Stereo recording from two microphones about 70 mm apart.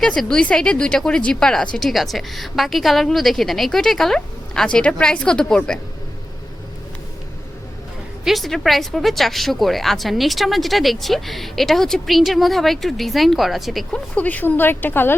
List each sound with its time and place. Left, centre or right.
0.0 s a woman's voice: centre
8.2 s speech: centre
13.9 s speech: left